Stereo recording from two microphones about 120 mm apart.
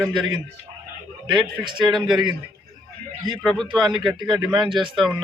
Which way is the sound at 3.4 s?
5° left (ahead or behind).